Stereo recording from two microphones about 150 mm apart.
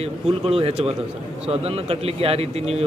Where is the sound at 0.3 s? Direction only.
40° right (ahead or behind).